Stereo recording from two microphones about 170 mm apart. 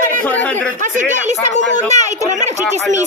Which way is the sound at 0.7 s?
50° right (ahead or behind).